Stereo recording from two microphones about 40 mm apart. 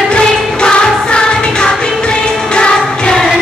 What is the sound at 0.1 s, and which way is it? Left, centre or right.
Music, left.